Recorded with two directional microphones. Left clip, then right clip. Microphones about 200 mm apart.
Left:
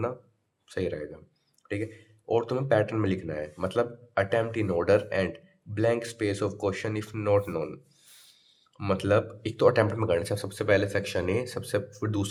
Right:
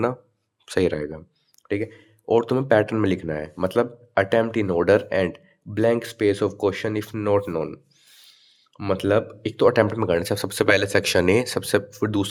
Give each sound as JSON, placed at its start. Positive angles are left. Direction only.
{"t": 0.6, "sound": "speech", "side_deg": -45}
{"t": 8.8, "sound": "speech", "side_deg": -30}